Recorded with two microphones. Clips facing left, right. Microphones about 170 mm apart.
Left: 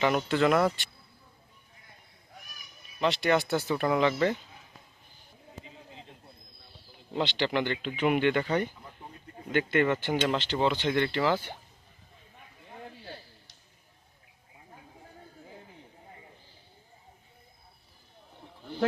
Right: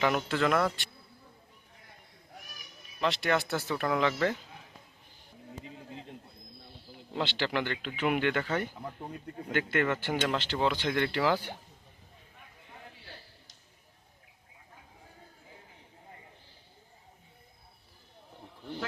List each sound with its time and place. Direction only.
0.0 s speech: centre (ahead or behind)
3.0 s speech: centre (ahead or behind)
7.1 s speech: 5° right (ahead or behind)
7.6 s speech: 20° left (ahead or behind)
7.9 s speech: centre (ahead or behind)
8.4 s speech: 15° left (ahead or behind)
9.5 s speech: 5° right (ahead or behind)
9.7 s speech: 10° left (ahead or behind)
10.3 s speech: 10° right (ahead or behind)